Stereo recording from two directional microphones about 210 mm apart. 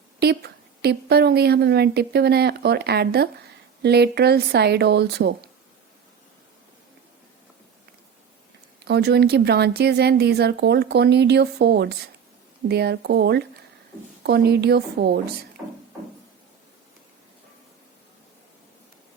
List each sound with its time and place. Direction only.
0.2 s speech: 50° right (ahead or behind)
8.8 s speech: 50° right (ahead or behind)